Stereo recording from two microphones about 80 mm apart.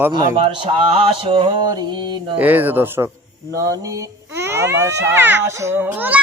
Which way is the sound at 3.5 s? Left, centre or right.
Right.